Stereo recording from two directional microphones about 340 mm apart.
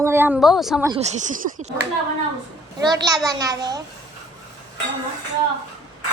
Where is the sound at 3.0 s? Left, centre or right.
Centre.